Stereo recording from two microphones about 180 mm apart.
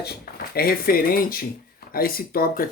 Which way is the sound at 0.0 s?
60° left (ahead or behind).